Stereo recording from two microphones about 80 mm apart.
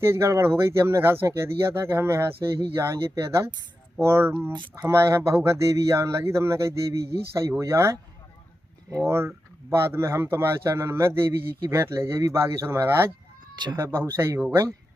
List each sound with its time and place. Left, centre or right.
0.0 s speech: right
4.5 s speech: right
4.8 s speech: right
9.0 s speech: right